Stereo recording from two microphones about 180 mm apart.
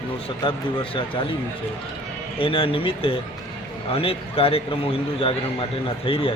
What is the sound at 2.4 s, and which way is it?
A man's voice, 30° left (ahead or behind).